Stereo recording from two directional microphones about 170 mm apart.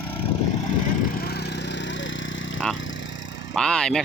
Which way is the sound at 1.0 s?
60° left (ahead or behind).